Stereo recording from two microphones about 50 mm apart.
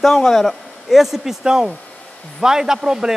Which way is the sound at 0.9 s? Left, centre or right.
Centre.